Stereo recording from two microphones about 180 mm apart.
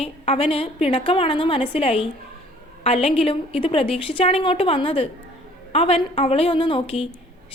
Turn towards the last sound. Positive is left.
turn(degrees=30)  # may be behind; listen again after turning